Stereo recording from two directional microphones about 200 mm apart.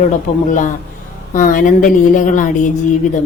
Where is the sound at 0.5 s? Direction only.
40° left (ahead or behind).